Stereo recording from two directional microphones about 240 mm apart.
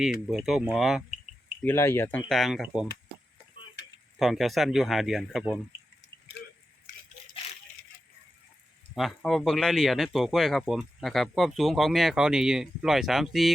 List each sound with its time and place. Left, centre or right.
0.3 s speech: centre
1.6 s speech: centre
3.8 s tick-tock: left
4.2 s speech: centre
9.0 s speech: centre